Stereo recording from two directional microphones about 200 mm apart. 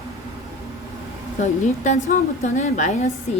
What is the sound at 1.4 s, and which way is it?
A woman's voice, 35° left (ahead or behind).